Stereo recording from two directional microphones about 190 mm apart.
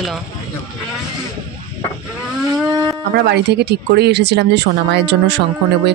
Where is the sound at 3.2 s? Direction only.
60° right (ahead or behind).